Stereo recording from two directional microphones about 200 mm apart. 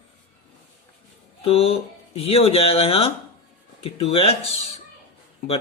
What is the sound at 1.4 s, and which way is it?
Speech, 30° left (ahead or behind).